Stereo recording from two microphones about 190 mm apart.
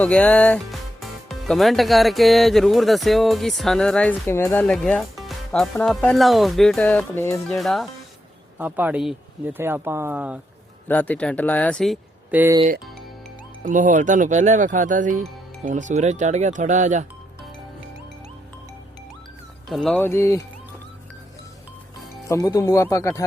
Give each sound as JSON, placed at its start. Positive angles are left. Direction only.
{"t": 0.0, "sound": "speech", "side_deg": 5}
{"t": 7.4, "sound": "speech", "side_deg": 0}
{"t": 10.8, "sound": "speech", "side_deg": 10}
{"t": 12.3, "sound": "speech", "side_deg": -10}
{"t": 13.6, "sound": "speech", "side_deg": -45}
{"t": 19.6, "sound": "speech", "side_deg": 0}
{"t": 22.3, "sound": "speech", "side_deg": 15}